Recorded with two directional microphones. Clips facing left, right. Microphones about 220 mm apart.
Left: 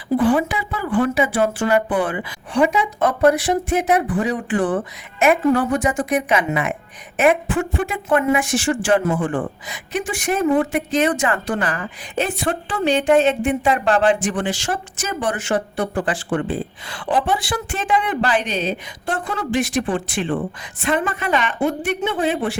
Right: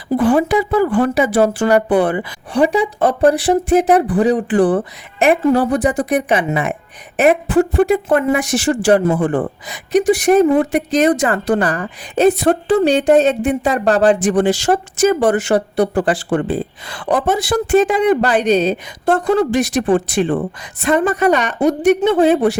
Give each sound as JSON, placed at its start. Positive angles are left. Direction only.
{"t": 0.2, "sound": "speech", "side_deg": -45}